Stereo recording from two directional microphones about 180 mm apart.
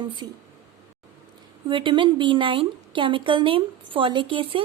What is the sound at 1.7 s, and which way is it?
Speech, 25° right (ahead or behind).